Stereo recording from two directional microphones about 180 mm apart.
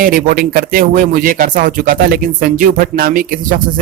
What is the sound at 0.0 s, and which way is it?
Speech, 50° right (ahead or behind).